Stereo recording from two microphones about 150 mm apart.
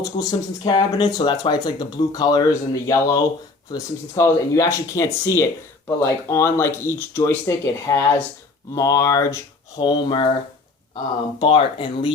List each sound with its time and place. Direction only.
0.0 s speech: 25° left (ahead or behind)